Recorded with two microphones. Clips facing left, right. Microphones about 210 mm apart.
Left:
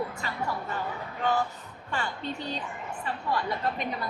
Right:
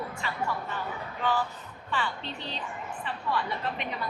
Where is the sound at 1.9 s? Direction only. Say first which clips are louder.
Left 1 dB; 45° left (ahead or behind).